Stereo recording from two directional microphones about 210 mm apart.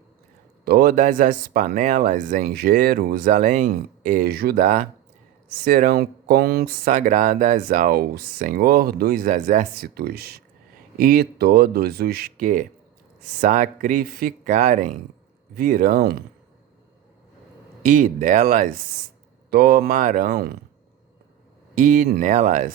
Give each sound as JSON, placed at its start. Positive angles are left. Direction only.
{"t": 0.6, "sound": "speech", "side_deg": -45}
{"t": 17.8, "sound": "speech", "side_deg": -40}
{"t": 21.8, "sound": "speech", "side_deg": -40}